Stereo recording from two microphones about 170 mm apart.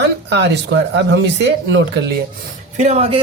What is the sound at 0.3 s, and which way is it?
Speech, 90° right.